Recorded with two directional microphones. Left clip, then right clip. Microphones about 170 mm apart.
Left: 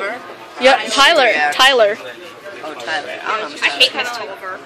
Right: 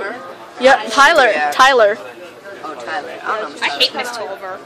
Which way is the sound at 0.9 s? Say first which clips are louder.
Right 1 dB; 10° right (ahead or behind).